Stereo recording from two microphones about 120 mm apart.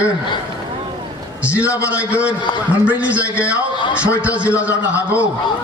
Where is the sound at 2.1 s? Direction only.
10° right (ahead or behind).